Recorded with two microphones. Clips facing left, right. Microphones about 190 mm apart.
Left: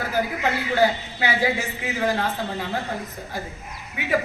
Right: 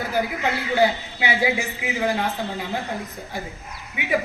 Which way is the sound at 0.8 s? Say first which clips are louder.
Right 1 dB; 15° right (ahead or behind).